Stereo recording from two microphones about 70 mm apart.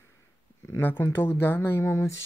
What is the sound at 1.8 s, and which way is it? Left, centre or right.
Speech, left.